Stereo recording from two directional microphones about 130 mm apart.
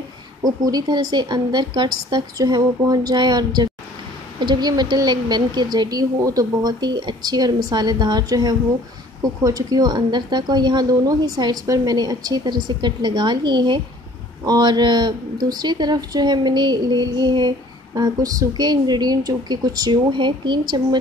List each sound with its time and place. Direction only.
0.4 s speech: 30° right (ahead or behind)